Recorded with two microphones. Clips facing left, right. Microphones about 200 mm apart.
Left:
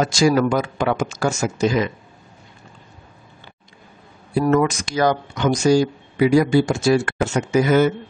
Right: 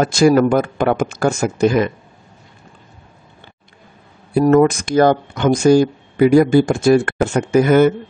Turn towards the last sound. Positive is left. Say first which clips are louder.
# right 4 dB
turn(degrees=-55)  # may be behind; listen again after turning